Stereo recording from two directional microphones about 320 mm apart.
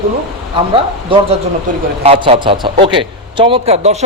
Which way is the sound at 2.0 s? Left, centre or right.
Centre.